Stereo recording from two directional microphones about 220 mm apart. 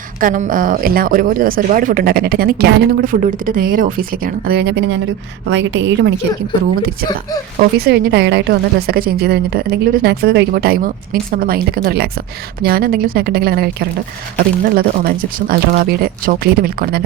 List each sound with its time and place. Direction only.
0.2 s a woman's voice: 35° right (ahead or behind); by 6.1 s 60° right (ahead or behind)
7.8 s a woman's voice: 45° right (ahead or behind)